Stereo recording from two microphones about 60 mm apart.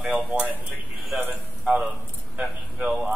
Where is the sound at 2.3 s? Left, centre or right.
Centre.